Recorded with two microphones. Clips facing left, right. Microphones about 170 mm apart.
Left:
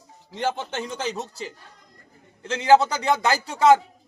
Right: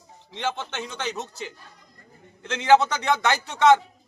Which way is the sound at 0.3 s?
40° left (ahead or behind).